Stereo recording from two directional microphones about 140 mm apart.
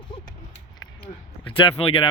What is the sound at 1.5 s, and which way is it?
Speech, 40° left (ahead or behind).